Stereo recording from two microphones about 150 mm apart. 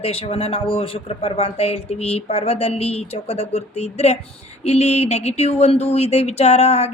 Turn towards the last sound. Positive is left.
turn(degrees=45)  # may be behind; listen again after turning